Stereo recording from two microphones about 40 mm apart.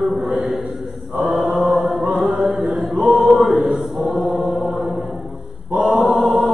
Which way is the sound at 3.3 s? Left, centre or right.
Centre.